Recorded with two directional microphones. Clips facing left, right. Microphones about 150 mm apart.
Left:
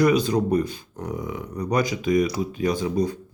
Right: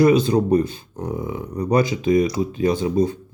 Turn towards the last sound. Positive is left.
turn(degrees=-25)  # may be behind; listen again after turning